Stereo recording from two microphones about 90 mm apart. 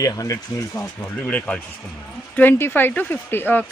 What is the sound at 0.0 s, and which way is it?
Speech, 40° left (ahead or behind).